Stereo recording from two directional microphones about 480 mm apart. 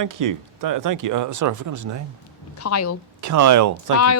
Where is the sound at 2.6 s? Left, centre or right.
Left.